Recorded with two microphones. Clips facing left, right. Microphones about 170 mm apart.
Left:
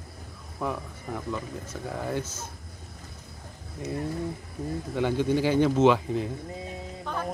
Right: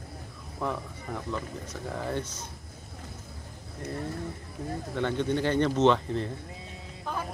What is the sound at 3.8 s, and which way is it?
Speech, 55° right (ahead or behind).